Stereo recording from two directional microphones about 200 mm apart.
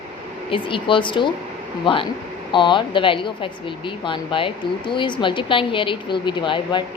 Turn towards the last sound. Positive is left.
turn(degrees=25)  # may be behind; listen again after turning